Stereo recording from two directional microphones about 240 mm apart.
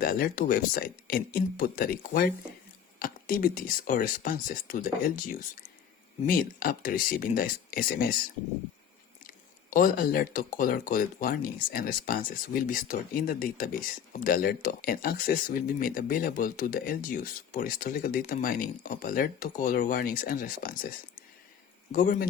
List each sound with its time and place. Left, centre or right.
0.0 s speech: left
6.2 s speech: left
9.2 s speech: left
21.9 s speech: left